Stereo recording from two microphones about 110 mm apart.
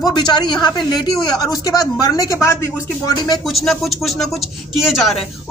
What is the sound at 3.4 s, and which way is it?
Speech, centre (ahead or behind).